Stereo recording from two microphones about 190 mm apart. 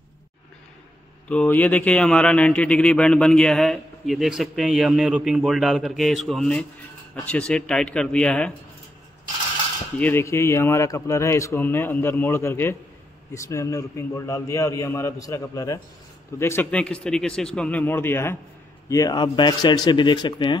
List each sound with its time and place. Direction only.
1.3 s speech: 5° left (ahead or behind)
9.9 s a man's voice: 10° left (ahead or behind)